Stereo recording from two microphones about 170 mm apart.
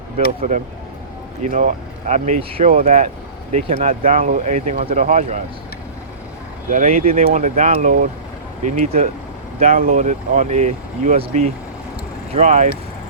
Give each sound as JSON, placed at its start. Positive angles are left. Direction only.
{"t": 1.5, "sound": "speech", "side_deg": -45}
{"t": 4.0, "sound": "speech", "side_deg": -50}
{"t": 6.7, "sound": "speech", "side_deg": -45}